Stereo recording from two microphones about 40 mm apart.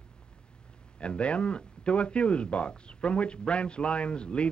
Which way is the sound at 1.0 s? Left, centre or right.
Left.